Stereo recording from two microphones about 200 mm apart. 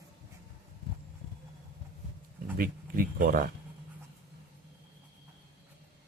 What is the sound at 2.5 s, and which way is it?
Speech, 45° right (ahead or behind).